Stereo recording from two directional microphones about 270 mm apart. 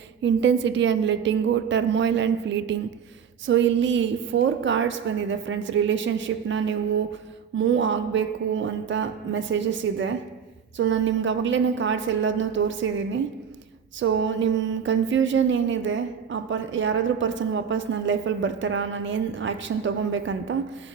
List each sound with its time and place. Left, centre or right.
0.2 s a woman's voice: right
14.0 s a woman's voice: right